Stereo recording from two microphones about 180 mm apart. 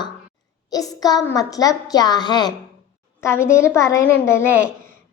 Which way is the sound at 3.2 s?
15° left (ahead or behind).